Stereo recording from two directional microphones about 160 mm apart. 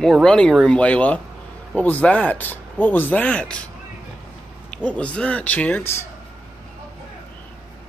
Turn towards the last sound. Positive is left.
turn(degrees=10)  # may be behind; listen again after turning